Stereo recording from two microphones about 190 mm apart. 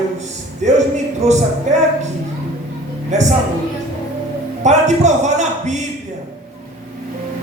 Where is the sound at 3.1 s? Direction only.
40° right (ahead or behind).